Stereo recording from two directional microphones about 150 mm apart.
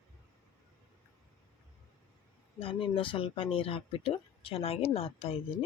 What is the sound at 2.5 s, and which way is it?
Speech, 35° left (ahead or behind).